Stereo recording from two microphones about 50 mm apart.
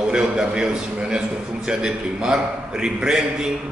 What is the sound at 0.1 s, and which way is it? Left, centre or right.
A man's voice, centre.